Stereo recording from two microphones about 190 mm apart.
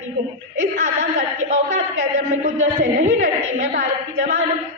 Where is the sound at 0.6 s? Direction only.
40° right (ahead or behind).